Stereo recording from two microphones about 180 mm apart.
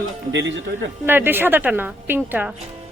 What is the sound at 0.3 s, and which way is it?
Speech, 85° right.